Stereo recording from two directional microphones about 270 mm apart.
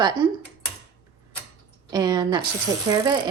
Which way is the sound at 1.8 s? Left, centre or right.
Centre.